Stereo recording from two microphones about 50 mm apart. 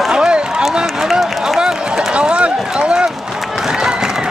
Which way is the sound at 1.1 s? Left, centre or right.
Centre.